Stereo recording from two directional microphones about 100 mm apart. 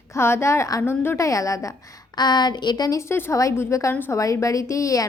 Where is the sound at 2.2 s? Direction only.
45° left (ahead or behind).